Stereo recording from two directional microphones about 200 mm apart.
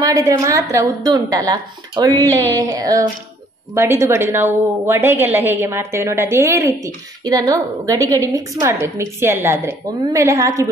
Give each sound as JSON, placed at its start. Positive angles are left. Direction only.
{"t": 0.0, "sound": "a woman's voice", "side_deg": -15}